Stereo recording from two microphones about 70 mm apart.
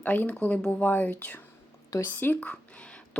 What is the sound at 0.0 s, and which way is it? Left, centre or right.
A woman's voice, left.